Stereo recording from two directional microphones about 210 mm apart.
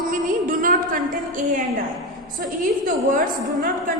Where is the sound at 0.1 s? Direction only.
40° right (ahead or behind).